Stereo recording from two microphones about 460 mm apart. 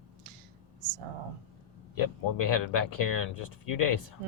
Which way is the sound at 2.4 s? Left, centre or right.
Left.